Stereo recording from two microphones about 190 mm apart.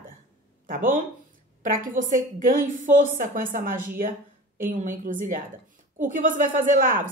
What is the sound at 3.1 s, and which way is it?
Speech, 45° right (ahead or behind).